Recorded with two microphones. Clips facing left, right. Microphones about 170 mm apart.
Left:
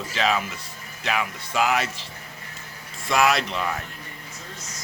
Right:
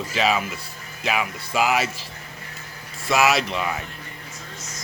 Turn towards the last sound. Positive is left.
turn(degrees=-10)  # may be behind; listen again after turning